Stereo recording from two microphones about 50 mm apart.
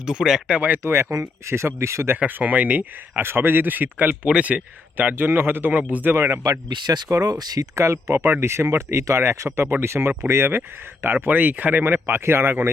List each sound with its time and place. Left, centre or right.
0.0 s speech: centre
0.5 s speech: right
0.8 s speech: right
2.1 s speech: right
3.2 s speech: right
5.1 s speech: right
6.1 s speech: right
7.8 s speech: right
11.0 s speech: right
12.0 s speech: right